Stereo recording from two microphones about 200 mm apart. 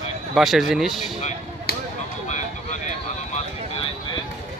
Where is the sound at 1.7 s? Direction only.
50° left (ahead or behind).